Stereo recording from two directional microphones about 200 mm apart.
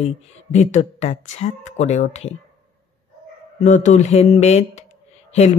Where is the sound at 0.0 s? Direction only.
35° left (ahead or behind).